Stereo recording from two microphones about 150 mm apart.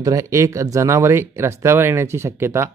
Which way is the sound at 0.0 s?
20° right (ahead or behind).